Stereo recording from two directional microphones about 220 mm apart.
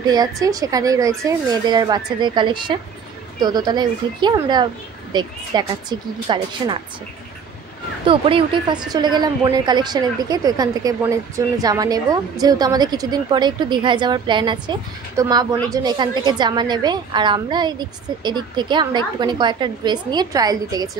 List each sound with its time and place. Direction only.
0.1 s speech: 15° right (ahead or behind)
8.1 s speech: 25° right (ahead or behind)